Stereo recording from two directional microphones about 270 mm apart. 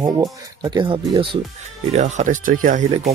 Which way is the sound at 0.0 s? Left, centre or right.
Centre.